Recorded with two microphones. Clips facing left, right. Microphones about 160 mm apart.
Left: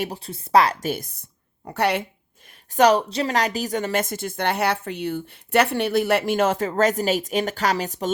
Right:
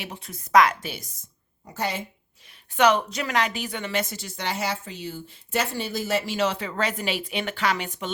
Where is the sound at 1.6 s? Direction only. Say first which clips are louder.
Left 7 dB; 65° left (ahead or behind).